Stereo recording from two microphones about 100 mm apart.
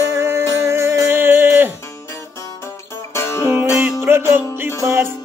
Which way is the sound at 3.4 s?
20° right (ahead or behind).